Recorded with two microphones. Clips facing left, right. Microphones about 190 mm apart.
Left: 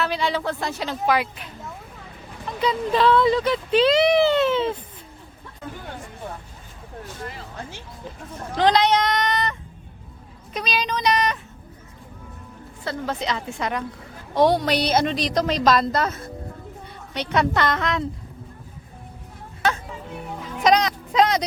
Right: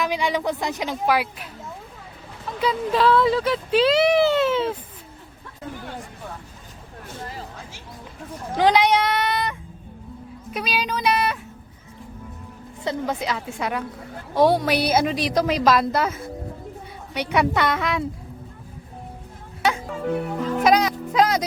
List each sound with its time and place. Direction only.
0.0 s speech: 15° right (ahead or behind)
2.6 s speech: 5° right (ahead or behind)
8.5 s speech: 10° right (ahead or behind)
12.8 s speech: 15° right (ahead or behind)
19.9 s speech: 70° right (ahead or behind)
20.6 s speech: 5° right (ahead or behind)